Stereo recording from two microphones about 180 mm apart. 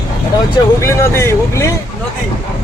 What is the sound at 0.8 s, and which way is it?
Speech, 15° left (ahead or behind).